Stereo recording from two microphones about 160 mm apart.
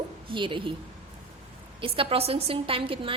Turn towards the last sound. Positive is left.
turn(degrees=-35)  # may be behind; listen again after turning